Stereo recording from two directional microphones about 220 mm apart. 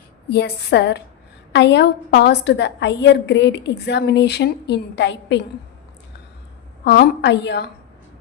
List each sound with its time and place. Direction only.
0.3 s a woman's voice: 50° left (ahead or behind)
6.8 s a woman's voice: 50° left (ahead or behind)